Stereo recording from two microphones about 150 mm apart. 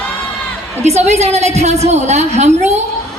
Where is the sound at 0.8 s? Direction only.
45° right (ahead or behind).